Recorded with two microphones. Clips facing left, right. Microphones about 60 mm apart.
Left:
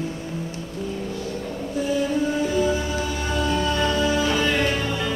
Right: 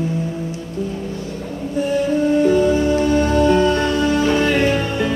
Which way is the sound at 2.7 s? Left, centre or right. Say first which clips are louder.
Right 10 dB; right.